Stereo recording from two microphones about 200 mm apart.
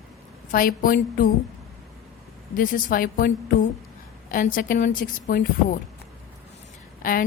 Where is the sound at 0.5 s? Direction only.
45° left (ahead or behind).